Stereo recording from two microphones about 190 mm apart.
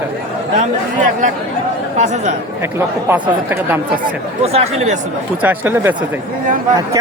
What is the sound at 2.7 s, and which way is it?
Speech, 15° right (ahead or behind).